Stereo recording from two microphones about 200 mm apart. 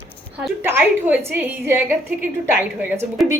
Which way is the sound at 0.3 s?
10° right (ahead or behind).